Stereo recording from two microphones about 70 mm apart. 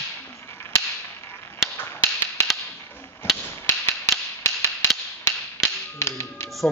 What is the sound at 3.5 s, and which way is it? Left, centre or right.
Mechanisms, left.